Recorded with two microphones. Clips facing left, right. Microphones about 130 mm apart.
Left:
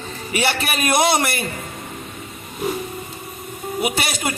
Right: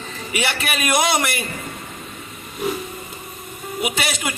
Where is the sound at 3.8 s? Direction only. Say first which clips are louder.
Left 1 dB; 40° left (ahead or behind).